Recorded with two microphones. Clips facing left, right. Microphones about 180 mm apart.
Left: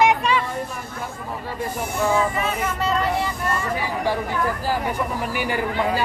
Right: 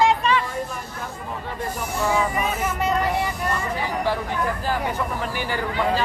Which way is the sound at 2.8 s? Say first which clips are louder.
Even; 15° right (ahead or behind).